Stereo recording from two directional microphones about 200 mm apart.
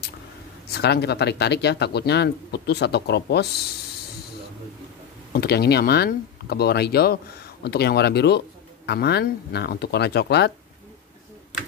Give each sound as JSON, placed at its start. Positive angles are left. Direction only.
{"t": 0.7, "sound": "speech", "side_deg": 55}
{"t": 5.3, "sound": "speech", "side_deg": 50}